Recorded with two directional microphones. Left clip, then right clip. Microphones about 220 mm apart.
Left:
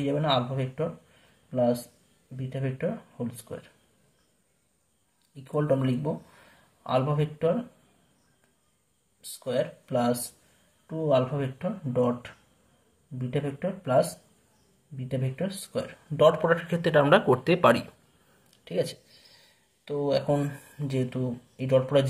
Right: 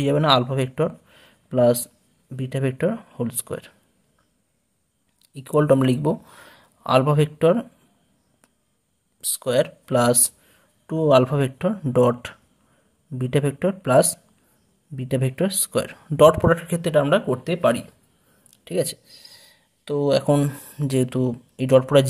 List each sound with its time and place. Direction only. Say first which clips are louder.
0.0 s speech: right 8 dB; 45° right (ahead or behind)
5.3 s speech: right 9 dB; 45° right (ahead or behind)
9.2 s speech: right 8 dB; 45° right (ahead or behind); by 17.8 s 10° right (ahead or behind)
18.5 s speech: right 5 dB; 35° right (ahead or behind)